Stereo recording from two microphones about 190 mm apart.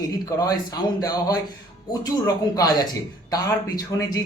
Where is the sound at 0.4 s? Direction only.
20° left (ahead or behind).